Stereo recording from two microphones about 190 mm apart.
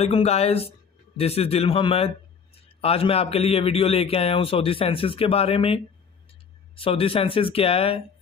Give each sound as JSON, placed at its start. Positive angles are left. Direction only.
{"t": 0.0, "sound": "a man's voice", "side_deg": 35}
{"t": 6.8, "sound": "speech", "side_deg": 30}